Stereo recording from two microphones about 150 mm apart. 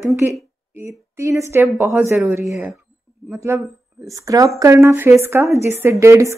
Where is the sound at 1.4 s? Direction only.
15° right (ahead or behind).